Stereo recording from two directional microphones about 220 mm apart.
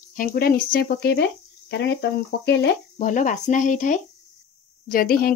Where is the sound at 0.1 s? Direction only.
40° left (ahead or behind).